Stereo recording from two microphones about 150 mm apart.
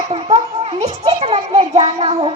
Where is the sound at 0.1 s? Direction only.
40° right (ahead or behind).